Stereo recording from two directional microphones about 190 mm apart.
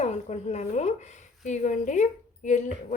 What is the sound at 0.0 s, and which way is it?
A woman's voice, 35° left (ahead or behind).